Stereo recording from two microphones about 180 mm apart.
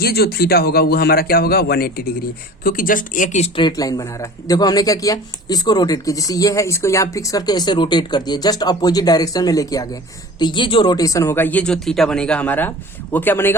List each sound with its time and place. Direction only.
0.0 s a man's voice: 60° left (ahead or behind); by 13.6 s 15° left (ahead or behind)